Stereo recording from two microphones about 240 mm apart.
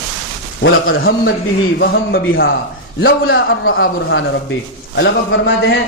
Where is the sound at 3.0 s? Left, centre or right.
Left.